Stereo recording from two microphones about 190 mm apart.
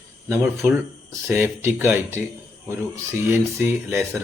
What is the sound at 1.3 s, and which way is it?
Speech, 10° right (ahead or behind).